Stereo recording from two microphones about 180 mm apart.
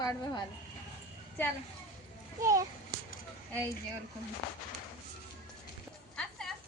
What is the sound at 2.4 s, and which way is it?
Whip, 20° right (ahead or behind).